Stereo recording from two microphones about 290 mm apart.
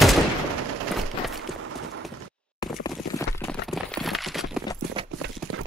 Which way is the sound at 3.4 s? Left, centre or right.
Centre.